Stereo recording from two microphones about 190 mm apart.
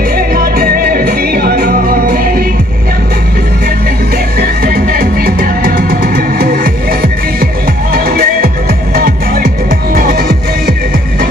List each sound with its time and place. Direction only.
0.1 s music: 50° right (ahead or behind)
4.4 s music: 50° right (ahead or behind)